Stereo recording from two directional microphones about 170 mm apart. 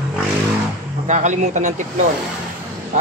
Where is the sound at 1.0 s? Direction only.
45° right (ahead or behind).